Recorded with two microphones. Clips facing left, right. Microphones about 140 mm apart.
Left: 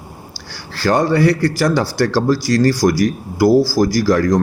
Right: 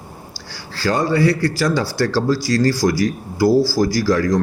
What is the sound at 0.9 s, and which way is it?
Speech, 60° left (ahead or behind).